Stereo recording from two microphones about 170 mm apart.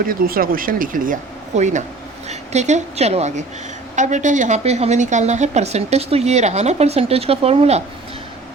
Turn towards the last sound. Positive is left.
turn(degrees=-35)  # may be behind; listen again after turning